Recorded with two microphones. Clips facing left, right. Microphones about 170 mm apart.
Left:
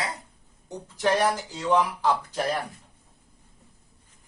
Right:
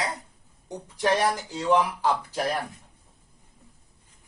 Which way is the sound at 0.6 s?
15° right (ahead or behind).